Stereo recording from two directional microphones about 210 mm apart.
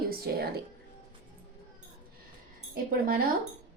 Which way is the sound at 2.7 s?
45° right (ahead or behind).